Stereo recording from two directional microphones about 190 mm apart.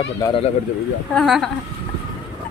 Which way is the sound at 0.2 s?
25° left (ahead or behind).